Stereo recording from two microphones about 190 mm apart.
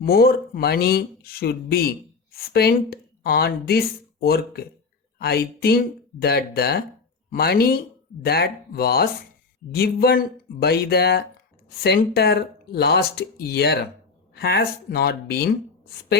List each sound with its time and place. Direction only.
0.0 s speech: 50° left (ahead or behind)